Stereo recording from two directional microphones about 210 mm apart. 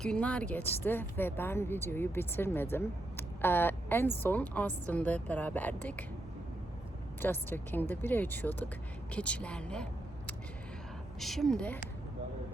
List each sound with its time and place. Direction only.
0.0 s a woman's voice: 5° left (ahead or behind)
7.2 s a woman's voice: 10° left (ahead or behind)